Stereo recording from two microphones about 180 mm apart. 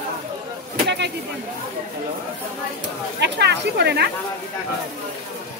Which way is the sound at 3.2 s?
70° right (ahead or behind).